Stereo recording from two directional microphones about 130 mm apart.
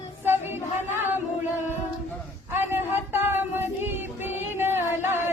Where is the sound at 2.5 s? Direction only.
15° right (ahead or behind).